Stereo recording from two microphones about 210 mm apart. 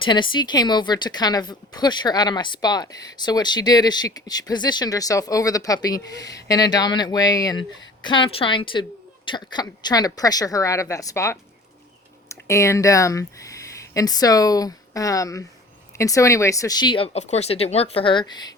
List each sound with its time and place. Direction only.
0.0 s a woman's voice: 20° left (ahead or behind)